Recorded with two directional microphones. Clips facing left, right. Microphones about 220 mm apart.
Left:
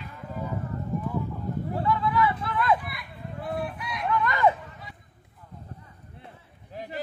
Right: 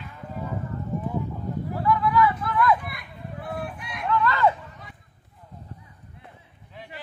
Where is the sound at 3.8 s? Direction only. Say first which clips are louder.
Left 2 dB; 50° right (ahead or behind).